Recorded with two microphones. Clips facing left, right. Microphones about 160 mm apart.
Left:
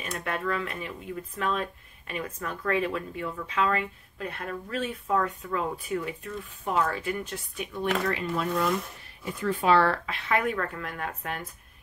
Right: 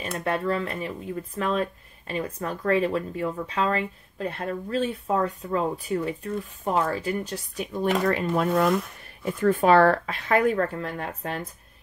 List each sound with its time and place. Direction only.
0.2 s speech: 35° right (ahead or behind)